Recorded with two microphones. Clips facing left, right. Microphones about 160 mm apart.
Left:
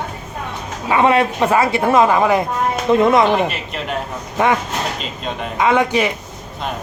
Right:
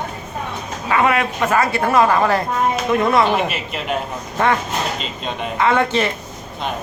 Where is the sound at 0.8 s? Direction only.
20° left (ahead or behind).